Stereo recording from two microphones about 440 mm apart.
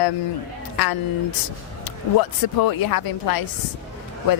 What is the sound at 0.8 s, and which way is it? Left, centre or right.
Speech, left.